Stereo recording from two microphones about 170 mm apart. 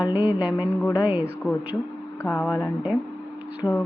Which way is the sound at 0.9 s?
15° left (ahead or behind).